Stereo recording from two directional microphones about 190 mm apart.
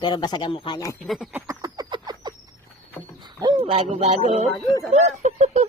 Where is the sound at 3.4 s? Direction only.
25° right (ahead or behind).